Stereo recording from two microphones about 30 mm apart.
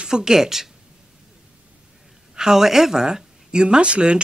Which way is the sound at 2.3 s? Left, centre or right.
Right.